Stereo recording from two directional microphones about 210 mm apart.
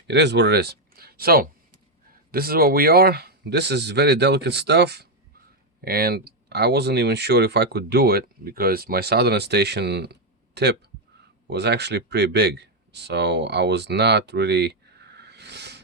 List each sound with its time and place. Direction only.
0.1 s speech: 55° right (ahead or behind)